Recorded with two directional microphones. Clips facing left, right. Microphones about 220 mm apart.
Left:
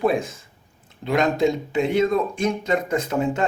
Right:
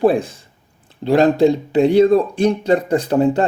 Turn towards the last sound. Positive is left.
turn(degrees=-35)  # may be behind; listen again after turning